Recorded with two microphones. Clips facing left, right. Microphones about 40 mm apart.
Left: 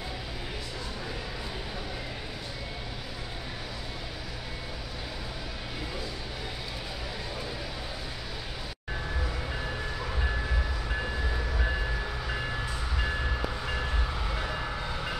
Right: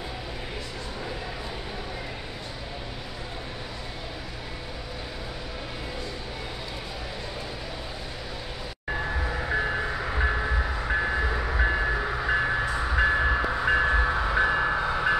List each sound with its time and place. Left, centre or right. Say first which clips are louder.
9.2 s music: right 5 dB; right
9.5 s music: right 9 dB; right
9.9 s train: right 6 dB; right